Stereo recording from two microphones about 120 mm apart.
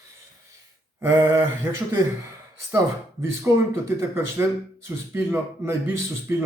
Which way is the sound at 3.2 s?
25° right (ahead or behind).